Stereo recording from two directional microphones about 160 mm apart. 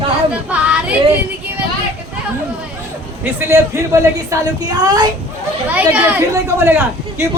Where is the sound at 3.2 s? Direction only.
15° right (ahead or behind).